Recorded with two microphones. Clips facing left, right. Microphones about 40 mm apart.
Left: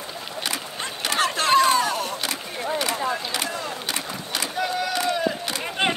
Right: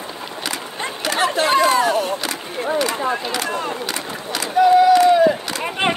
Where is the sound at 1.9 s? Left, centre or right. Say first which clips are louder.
Right 6 dB; right.